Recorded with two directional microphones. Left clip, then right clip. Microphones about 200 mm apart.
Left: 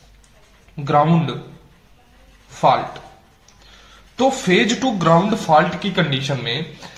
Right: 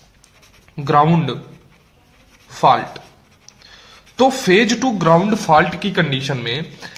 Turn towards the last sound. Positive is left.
turn(degrees=-35)  # may be behind; listen again after turning